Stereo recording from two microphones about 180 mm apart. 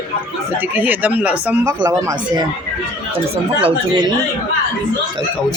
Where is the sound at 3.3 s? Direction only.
30° right (ahead or behind).